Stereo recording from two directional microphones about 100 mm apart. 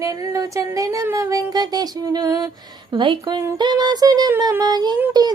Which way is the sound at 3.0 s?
50° right (ahead or behind).